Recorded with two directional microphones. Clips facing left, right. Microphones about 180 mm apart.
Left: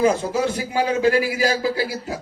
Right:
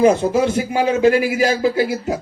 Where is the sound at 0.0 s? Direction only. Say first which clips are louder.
Right 5 dB; 20° right (ahead or behind).